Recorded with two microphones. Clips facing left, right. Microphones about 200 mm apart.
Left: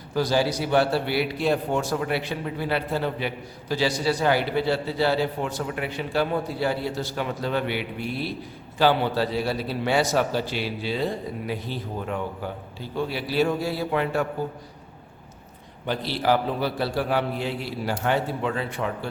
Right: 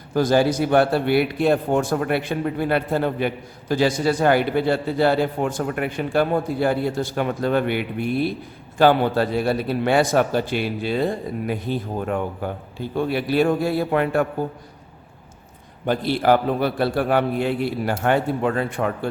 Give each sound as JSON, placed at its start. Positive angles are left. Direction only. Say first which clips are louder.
{"t": 0.1, "sound": "a man's voice", "louder": "right 5 dB", "side_deg": -50}
{"t": 15.9, "sound": "a man's voice", "louder": "right 5 dB", "side_deg": -50}